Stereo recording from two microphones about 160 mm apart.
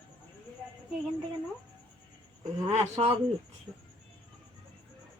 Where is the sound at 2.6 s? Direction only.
45° right (ahead or behind).